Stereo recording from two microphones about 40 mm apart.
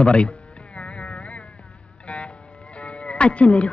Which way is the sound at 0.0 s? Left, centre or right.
Left.